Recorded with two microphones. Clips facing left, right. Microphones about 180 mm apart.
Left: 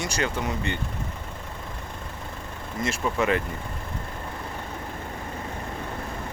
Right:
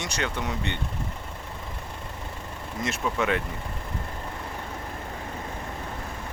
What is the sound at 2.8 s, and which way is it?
Speech, centre (ahead or behind).